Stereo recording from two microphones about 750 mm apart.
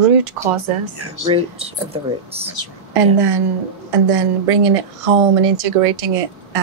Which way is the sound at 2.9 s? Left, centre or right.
Right.